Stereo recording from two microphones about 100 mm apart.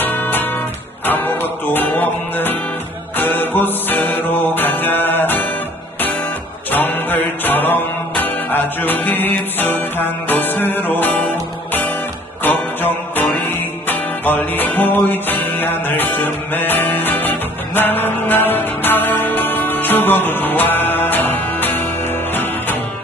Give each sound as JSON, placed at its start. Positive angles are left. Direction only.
{"t": 0.0, "sound": "music", "side_deg": 20}
{"t": 6.7, "sound": "music", "side_deg": 20}